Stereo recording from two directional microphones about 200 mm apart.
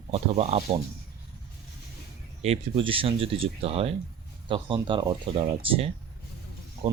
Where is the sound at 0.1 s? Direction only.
30° right (ahead or behind).